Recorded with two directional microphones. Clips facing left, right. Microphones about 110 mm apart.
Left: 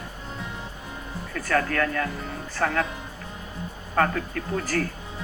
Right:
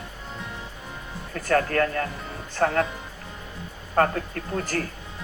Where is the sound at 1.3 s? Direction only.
35° right (ahead or behind).